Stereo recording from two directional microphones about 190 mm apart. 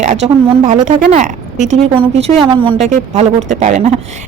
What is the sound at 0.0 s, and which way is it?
A woman's voice, 35° right (ahead or behind).